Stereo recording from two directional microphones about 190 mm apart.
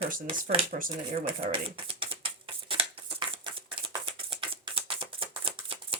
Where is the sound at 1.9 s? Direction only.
25° right (ahead or behind).